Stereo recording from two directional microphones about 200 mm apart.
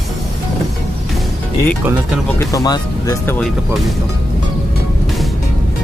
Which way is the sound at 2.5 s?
15° left (ahead or behind).